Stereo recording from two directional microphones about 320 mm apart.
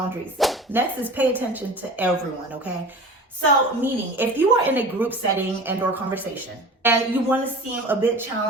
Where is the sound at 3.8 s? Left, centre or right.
Centre.